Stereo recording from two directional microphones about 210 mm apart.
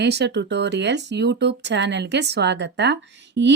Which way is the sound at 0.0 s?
50° right (ahead or behind).